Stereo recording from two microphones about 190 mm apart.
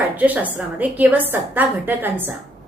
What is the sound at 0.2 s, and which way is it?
A woman's voice, 10° right (ahead or behind).